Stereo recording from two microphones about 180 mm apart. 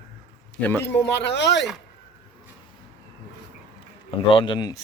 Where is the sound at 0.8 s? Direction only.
70° left (ahead or behind).